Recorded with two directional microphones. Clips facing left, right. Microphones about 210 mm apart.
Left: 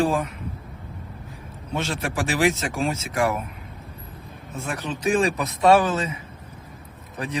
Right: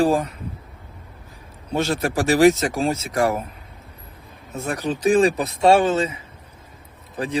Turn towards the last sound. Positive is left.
turn(degrees=-30)  # may be behind; listen again after turning